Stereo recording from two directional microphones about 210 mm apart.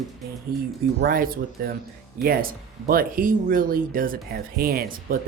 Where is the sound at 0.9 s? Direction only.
45° right (ahead or behind).